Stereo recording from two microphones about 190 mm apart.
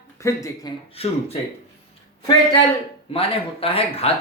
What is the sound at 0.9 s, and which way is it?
Speech, 30° left (ahead or behind).